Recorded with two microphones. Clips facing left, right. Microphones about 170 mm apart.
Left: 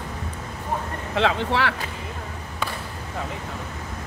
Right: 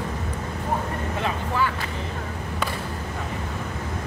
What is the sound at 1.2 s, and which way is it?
Vehicle, 90° left.